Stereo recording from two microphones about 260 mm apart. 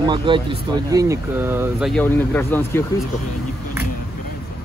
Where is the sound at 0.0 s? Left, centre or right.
Centre.